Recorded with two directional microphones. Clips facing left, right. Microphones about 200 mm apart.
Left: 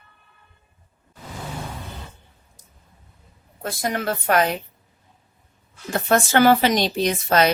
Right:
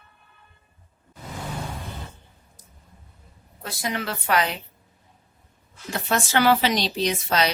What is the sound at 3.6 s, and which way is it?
Speech, 50° left (ahead or behind).